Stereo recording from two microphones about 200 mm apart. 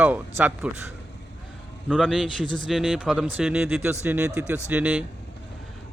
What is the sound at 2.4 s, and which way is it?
Speech, 70° right (ahead or behind).